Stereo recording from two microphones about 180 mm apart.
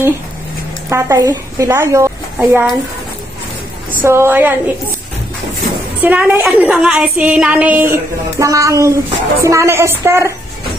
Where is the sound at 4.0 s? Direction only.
10° right (ahead or behind).